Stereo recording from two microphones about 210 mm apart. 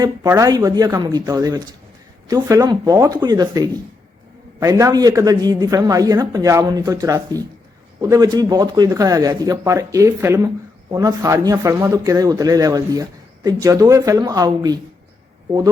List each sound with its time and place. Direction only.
0.0 s a man's voice: 15° right (ahead or behind)